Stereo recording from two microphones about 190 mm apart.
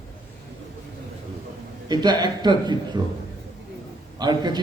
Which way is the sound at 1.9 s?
20° right (ahead or behind).